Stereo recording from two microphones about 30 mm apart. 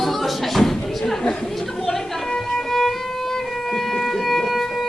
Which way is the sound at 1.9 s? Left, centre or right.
Left.